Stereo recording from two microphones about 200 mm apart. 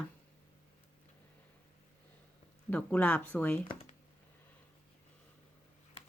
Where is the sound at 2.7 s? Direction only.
10° left (ahead or behind).